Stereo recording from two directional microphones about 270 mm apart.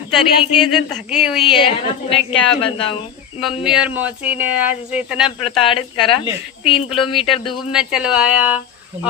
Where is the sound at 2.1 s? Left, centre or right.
Centre.